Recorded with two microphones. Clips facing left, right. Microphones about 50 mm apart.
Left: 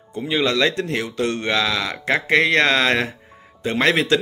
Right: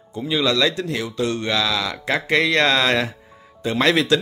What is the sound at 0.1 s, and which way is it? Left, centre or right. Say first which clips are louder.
Speech: even; left.